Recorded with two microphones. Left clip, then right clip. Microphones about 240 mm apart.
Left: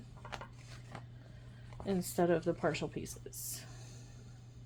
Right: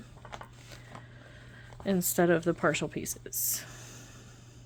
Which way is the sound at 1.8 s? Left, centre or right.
Right.